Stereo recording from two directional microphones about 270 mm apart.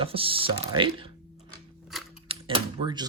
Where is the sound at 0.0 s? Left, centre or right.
Centre.